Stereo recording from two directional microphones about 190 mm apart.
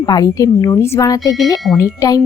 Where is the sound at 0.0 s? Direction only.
20° left (ahead or behind).